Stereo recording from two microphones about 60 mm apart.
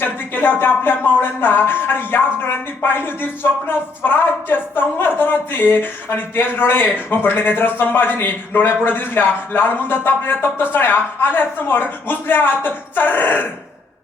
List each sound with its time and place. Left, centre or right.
0.0 s speech: left